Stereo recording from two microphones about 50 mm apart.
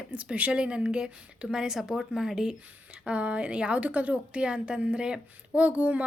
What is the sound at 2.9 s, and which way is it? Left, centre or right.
A woman's voice, right.